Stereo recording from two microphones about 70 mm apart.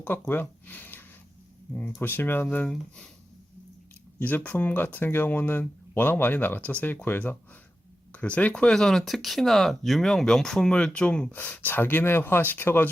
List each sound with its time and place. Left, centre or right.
0.0 s speech: left; by 3.1 s centre
4.2 s speech: left
11.3 s speech: left